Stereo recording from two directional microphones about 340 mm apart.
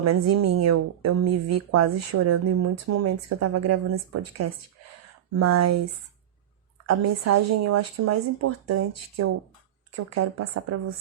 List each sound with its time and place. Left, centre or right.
0.0 s a woman's voice: right
6.8 s a woman's voice: right